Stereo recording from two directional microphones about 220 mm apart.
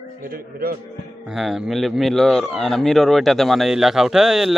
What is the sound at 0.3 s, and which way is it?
Speech, 40° right (ahead or behind).